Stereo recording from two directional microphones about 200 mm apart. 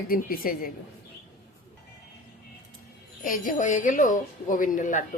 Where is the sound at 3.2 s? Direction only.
40° left (ahead or behind).